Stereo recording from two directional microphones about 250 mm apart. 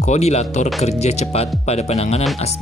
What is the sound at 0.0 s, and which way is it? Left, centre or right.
Speech, left.